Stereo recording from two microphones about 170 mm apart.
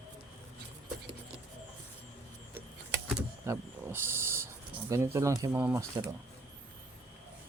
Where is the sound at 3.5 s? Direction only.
15° right (ahead or behind).